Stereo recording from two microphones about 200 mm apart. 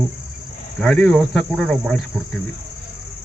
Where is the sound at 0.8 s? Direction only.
5° left (ahead or behind).